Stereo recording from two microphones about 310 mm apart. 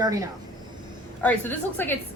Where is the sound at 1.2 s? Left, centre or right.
Centre.